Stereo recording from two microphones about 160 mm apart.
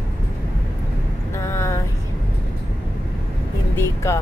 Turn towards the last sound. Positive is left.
turn(degrees=15)  # may be behind; listen again after turning